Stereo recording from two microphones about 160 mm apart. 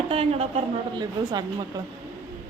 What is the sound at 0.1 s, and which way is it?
Speech, 40° right (ahead or behind).